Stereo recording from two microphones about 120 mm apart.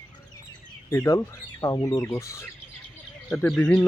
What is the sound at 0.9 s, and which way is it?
Speech, 25° left (ahead or behind).